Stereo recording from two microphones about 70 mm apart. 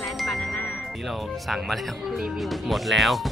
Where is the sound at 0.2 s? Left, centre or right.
Centre.